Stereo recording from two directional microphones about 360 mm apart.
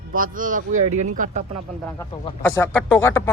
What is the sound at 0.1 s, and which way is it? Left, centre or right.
A man's voice, right.